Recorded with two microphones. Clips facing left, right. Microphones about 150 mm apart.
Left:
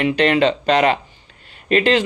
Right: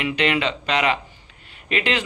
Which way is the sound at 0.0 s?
35° left (ahead or behind).